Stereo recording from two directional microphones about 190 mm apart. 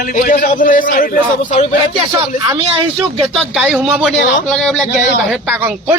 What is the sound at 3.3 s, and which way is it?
Speech, centre (ahead or behind).